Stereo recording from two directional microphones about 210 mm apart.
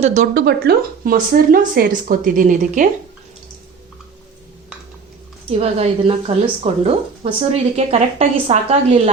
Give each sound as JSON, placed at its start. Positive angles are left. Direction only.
{"t": 0.0, "sound": "speech", "side_deg": -35}
{"t": 0.4, "sound": "a woman's voice", "side_deg": -50}
{"t": 5.5, "sound": "speech", "side_deg": -30}